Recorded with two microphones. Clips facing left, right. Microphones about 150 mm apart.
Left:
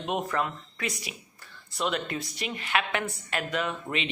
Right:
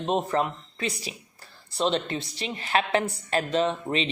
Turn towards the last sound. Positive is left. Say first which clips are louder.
# right 5 dB
turn(degrees=-35)  # may be behind; listen again after turning